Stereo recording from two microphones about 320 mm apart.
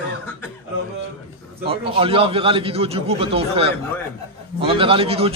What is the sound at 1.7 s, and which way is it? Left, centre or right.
A man's voice, centre.